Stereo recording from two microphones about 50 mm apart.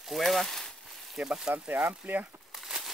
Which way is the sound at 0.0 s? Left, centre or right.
Centre.